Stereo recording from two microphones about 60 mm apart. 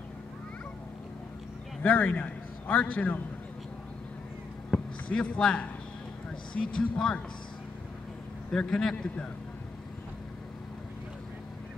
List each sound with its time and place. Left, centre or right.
1.8 s a man's voice: left
4.7 s a sound: left
5.4 s speech: centre
8.5 s a man's voice: centre